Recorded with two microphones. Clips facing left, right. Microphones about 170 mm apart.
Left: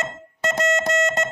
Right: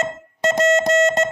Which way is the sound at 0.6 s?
30° right (ahead or behind).